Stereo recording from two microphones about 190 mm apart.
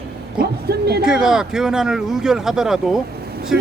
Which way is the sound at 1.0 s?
5° right (ahead or behind).